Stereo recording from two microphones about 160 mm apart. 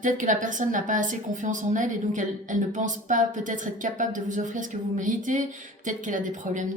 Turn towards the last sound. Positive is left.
turn(degrees=-50)  # may be behind; listen again after turning